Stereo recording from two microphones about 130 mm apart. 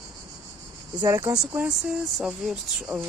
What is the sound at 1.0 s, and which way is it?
Speech, 25° right (ahead or behind).